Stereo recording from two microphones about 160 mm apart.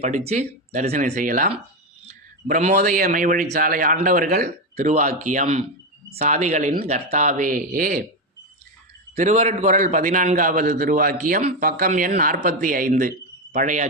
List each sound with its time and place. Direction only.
0.0 s a man's voice: 40° right (ahead or behind)
2.8 s a man's voice: 60° right (ahead or behind)
4.8 s speech: 45° right (ahead or behind)
9.1 s speech: 45° right (ahead or behind)
9.7 s a man's voice: 55° right (ahead or behind)